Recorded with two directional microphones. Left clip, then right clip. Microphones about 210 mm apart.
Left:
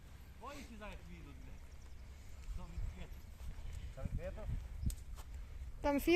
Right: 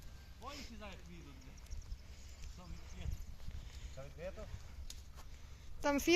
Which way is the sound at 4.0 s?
35° right (ahead or behind).